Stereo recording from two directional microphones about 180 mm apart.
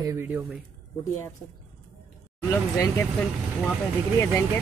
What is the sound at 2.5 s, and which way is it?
Speech, 15° left (ahead or behind).